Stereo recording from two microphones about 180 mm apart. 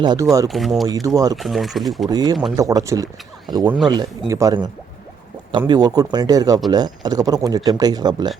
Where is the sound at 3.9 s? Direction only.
20° right (ahead or behind).